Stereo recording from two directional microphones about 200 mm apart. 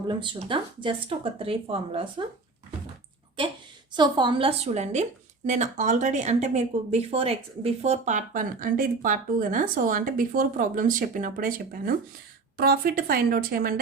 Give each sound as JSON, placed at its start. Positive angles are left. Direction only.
{"t": 0.1, "sound": "speech", "side_deg": -25}
{"t": 3.9, "sound": "speech", "side_deg": -25}